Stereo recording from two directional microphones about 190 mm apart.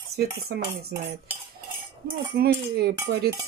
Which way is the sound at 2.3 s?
55° right (ahead or behind).